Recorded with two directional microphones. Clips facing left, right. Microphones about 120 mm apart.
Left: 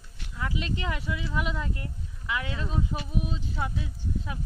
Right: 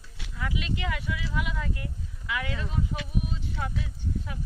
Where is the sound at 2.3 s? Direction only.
25° left (ahead or behind).